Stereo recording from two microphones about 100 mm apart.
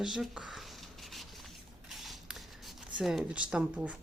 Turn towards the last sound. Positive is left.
turn(degrees=-10)  # may be behind; listen again after turning